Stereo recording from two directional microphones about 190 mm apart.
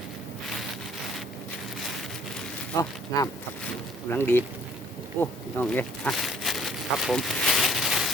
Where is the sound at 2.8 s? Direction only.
15° left (ahead or behind).